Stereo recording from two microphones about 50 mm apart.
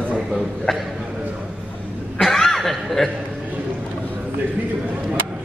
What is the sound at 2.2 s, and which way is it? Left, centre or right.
Chuckle, centre.